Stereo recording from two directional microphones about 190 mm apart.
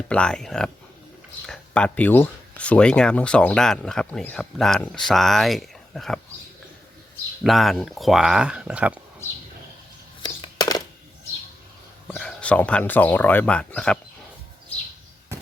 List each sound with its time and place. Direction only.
0.1 s speech: 5° left (ahead or behind)
7.4 s speech: centre (ahead or behind)
10.2 s coin: 20° left (ahead or behind)
12.1 s speech: 5° left (ahead or behind)